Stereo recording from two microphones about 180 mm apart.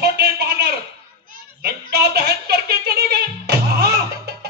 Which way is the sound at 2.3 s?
60° right (ahead or behind).